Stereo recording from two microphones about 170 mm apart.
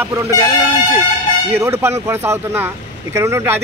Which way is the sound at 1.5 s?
15° right (ahead or behind).